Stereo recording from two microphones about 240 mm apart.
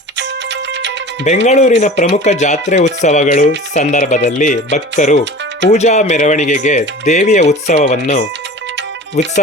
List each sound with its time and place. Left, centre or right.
0.2 s music: right
1.2 s speech: left